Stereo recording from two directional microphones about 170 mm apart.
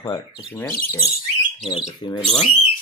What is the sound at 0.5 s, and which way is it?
Speech, 10° left (ahead or behind).